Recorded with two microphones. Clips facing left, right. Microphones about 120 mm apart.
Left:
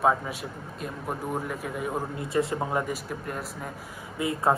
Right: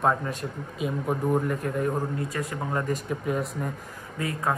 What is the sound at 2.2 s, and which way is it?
Speech, 25° left (ahead or behind).